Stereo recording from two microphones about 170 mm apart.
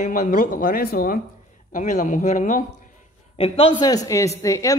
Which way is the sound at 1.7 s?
45° left (ahead or behind).